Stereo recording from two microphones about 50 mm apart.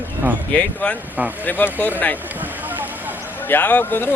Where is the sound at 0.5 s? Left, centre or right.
Left.